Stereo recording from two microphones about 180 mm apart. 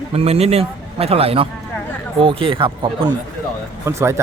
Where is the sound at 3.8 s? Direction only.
15° right (ahead or behind).